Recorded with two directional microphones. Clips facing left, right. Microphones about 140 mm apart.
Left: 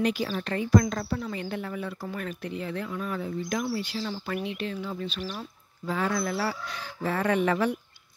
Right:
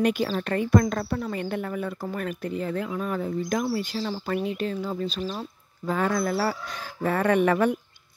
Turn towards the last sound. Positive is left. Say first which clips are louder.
# right 4 dB
turn(degrees=-55)  # may be behind; listen again after turning